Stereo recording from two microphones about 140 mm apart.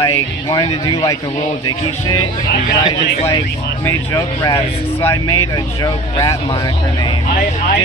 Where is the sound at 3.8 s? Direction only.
25° left (ahead or behind).